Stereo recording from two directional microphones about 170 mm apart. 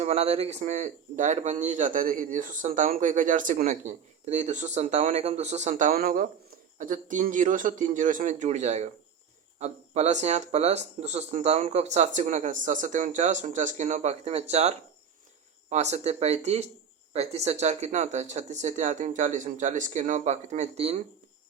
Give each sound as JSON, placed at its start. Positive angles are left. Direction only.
{"t": 0.0, "sound": "speech", "side_deg": -40}